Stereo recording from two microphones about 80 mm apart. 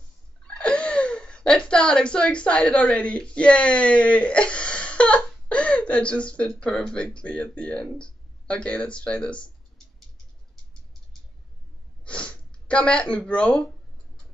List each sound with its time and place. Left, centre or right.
0.6 s speech: centre
12.0 s sniff: centre